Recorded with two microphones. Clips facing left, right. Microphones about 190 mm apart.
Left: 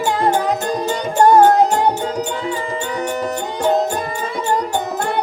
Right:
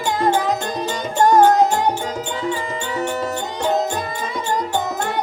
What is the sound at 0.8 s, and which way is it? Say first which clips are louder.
Music: left 3 dB; 40° left (ahead or behind).